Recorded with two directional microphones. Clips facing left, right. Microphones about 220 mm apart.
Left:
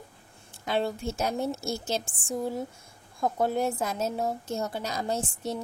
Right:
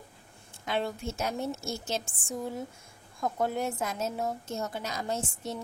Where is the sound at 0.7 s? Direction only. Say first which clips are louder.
Left 3 dB; 35° left (ahead or behind).